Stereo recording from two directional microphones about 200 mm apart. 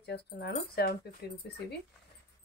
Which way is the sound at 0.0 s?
55° left (ahead or behind).